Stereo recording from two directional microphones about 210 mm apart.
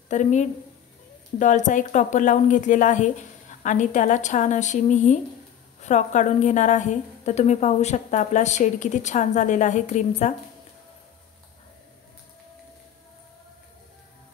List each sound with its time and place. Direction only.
0.1 s a woman's voice: 35° left (ahead or behind)